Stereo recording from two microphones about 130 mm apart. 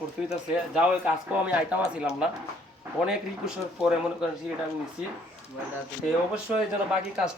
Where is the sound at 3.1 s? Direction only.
5° right (ahead or behind).